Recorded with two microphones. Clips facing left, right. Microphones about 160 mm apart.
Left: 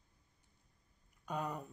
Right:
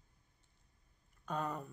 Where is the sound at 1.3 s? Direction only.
10° left (ahead or behind).